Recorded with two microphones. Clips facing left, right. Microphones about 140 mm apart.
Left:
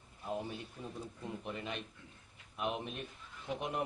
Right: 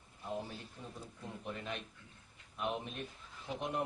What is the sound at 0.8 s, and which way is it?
Speech, 5° left (ahead or behind).